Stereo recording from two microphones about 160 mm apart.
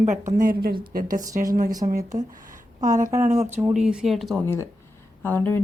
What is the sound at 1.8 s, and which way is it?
Speech, 35° right (ahead or behind).